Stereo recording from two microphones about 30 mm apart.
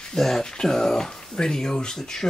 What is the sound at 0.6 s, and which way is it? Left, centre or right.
Speech, centre.